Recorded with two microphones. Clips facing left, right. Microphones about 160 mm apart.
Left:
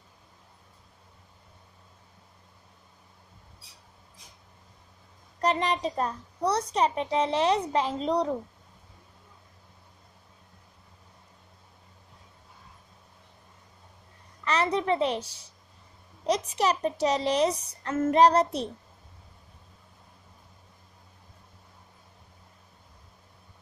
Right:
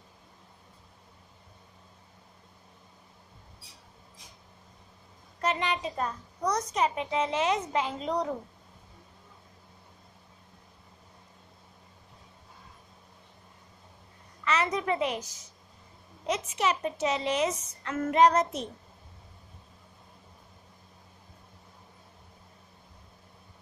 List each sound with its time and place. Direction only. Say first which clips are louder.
5.4 s a child's voice: left 4 dB; 35° left (ahead or behind)
14.4 s a sound: left 2 dB; 35° left (ahead or behind)
16.3 s a child's voice: left 3 dB; 35° left (ahead or behind)